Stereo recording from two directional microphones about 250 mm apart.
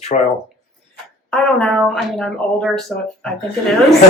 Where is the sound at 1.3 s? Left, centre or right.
Centre.